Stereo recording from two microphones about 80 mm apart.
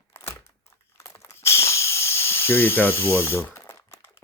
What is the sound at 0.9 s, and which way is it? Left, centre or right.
Snake, left.